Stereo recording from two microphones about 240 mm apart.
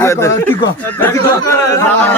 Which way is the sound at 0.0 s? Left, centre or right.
Centre.